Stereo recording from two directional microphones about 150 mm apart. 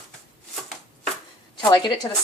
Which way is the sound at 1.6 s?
30° left (ahead or behind).